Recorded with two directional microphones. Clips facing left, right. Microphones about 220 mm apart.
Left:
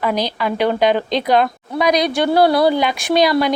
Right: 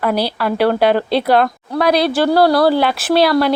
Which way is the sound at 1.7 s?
15° left (ahead or behind).